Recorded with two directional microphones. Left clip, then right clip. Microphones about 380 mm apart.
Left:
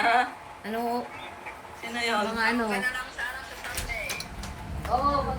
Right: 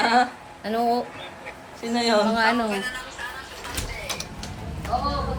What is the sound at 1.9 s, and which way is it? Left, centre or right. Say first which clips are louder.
Speech: right 6 dB; centre.